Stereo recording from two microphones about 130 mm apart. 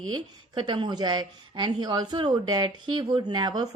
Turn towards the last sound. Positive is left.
turn(degrees=-30)  # may be behind; listen again after turning